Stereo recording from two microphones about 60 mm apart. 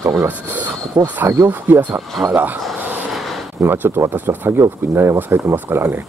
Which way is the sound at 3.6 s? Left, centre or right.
Right.